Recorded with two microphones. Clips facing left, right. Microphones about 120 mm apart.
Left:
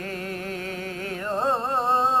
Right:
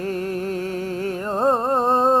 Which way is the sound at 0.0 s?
40° right (ahead or behind).